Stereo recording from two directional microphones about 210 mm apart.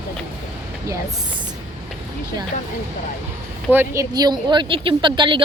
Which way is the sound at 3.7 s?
10° right (ahead or behind).